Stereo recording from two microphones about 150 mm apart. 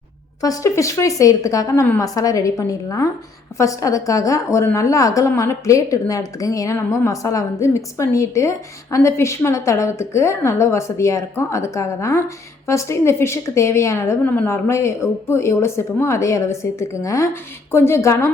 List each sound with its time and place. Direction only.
0.4 s a woman's voice: 20° left (ahead or behind)